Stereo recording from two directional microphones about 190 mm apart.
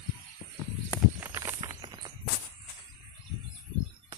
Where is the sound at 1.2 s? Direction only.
10° right (ahead or behind).